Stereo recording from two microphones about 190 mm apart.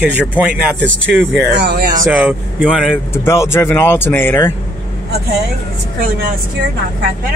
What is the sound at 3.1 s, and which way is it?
Speech, 15° left (ahead or behind).